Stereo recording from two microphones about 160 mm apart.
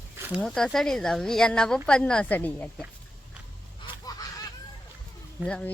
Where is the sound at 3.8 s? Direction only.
25° left (ahead or behind).